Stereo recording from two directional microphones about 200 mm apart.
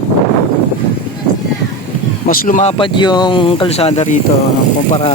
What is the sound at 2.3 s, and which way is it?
Speech, 40° left (ahead or behind).